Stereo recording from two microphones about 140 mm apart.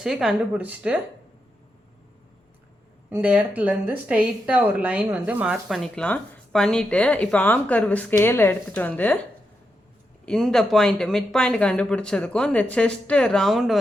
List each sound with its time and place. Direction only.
0.0 s speech: centre (ahead or behind)
3.1 s a woman's voice: 10° right (ahead or behind); by 9.2 s 10° left (ahead or behind)
10.2 s a woman's voice: 5° left (ahead or behind)